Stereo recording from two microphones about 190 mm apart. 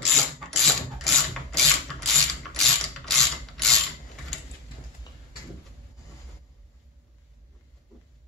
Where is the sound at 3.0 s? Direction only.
Centre (ahead or behind).